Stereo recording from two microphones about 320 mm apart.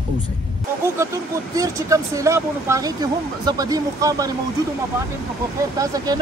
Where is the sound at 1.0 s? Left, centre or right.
Centre.